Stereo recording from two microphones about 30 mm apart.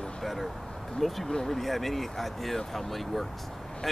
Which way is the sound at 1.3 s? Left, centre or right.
Centre.